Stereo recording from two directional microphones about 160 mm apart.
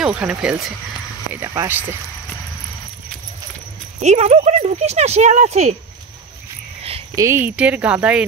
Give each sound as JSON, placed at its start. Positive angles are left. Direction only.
{"t": 0.0, "sound": "speech", "side_deg": -5}
{"t": 1.5, "sound": "speech", "side_deg": -20}
{"t": 4.0, "sound": "speech", "side_deg": -45}
{"t": 7.2, "sound": "speech", "side_deg": -15}